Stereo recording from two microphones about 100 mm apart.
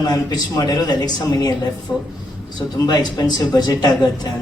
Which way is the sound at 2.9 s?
40° left (ahead or behind).